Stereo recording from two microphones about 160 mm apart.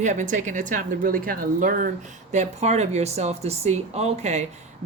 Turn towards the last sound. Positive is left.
turn(degrees=-45)  # may be behind; listen again after turning